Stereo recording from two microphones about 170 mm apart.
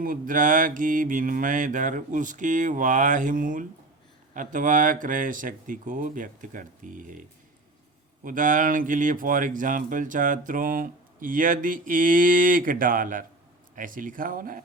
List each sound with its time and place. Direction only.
0.0 s speech: 55° right (ahead or behind)